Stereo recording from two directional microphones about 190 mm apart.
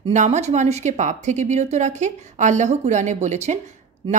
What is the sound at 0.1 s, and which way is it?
Speech, 40° right (ahead or behind).